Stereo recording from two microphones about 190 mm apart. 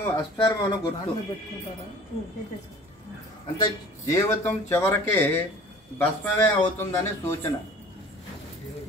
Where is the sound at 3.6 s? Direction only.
15° left (ahead or behind).